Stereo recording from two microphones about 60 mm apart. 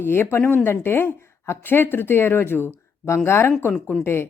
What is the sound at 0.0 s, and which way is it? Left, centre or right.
Speech, left.